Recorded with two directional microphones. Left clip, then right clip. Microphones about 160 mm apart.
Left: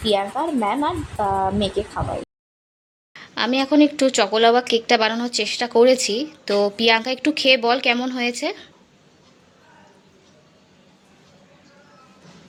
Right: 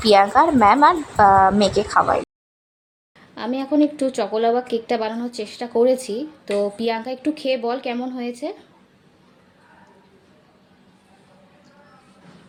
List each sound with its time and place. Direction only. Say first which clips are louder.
0.0 s a woman's voice: right 7 dB; 25° right (ahead or behind)
3.1 s speech: left 5 dB; centre (ahead or behind)